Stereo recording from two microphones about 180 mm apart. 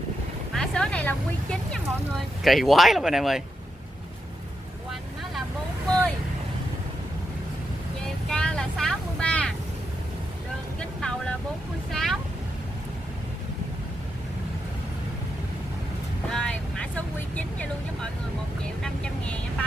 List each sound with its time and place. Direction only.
0.6 s speech: 5° left (ahead or behind)
8.3 s vehicle: 5° left (ahead or behind)
10.8 s vehicle: 5° left (ahead or behind)
16.3 s vehicle: 5° left (ahead or behind)
18.8 s vehicle: 5° left (ahead or behind)